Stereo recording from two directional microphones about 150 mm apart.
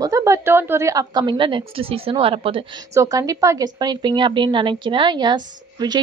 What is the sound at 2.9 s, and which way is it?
A woman's voice, 20° right (ahead or behind).